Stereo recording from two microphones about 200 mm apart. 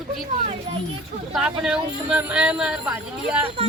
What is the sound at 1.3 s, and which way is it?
Speech, 5° right (ahead or behind).